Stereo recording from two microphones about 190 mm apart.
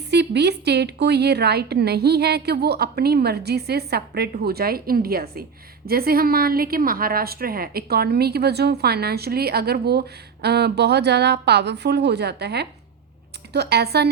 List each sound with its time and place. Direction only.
0.1 s a woman's voice: 60° right (ahead or behind)